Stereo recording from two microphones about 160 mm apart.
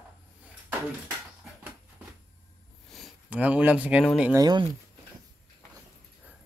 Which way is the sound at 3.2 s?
10° right (ahead or behind).